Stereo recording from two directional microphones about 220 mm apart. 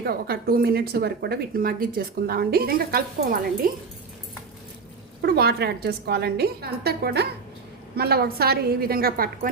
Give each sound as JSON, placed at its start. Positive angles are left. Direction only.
{"t": 0.0, "sound": "speech", "side_deg": -45}
{"t": 5.2, "sound": "speech", "side_deg": -45}